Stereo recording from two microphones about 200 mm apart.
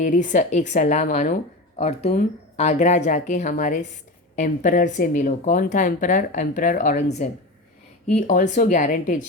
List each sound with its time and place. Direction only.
0.0 s speech: 40° left (ahead or behind)